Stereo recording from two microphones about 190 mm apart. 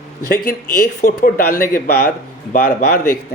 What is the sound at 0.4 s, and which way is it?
A man's voice, 45° left (ahead or behind).